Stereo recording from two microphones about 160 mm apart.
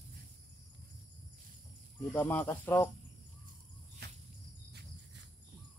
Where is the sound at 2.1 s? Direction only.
10° left (ahead or behind).